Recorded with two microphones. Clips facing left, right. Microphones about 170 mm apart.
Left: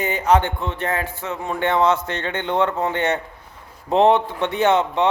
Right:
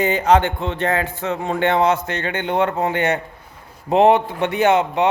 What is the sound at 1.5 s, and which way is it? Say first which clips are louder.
Speech: right 2 dB; 70° right (ahead or behind).